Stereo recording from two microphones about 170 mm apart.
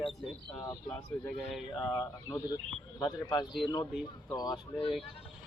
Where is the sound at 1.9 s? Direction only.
20° left (ahead or behind).